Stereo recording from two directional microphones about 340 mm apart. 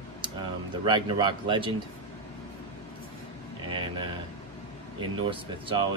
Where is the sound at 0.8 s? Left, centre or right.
Centre.